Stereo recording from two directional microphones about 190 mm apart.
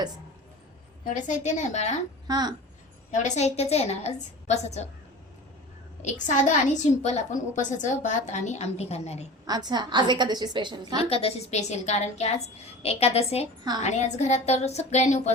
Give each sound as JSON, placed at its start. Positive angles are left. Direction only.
{"t": 1.1, "sound": "a woman's voice", "side_deg": 40}
{"t": 2.2, "sound": "a woman's voice", "side_deg": -20}
{"t": 3.2, "sound": "a woman's voice", "side_deg": 35}
{"t": 6.0, "sound": "a woman's voice", "side_deg": 40}
{"t": 9.5, "sound": "a woman's voice", "side_deg": -20}
{"t": 11.1, "sound": "a woman's voice", "side_deg": 30}